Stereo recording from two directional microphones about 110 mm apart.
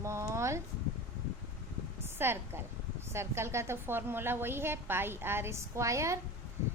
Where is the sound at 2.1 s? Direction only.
20° right (ahead or behind).